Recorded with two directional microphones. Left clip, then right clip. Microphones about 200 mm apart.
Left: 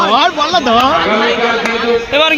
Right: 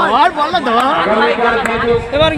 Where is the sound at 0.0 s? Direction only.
40° left (ahead or behind).